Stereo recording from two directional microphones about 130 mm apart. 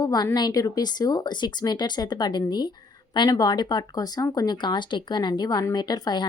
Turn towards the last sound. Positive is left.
turn(degrees=30)  # may be behind; listen again after turning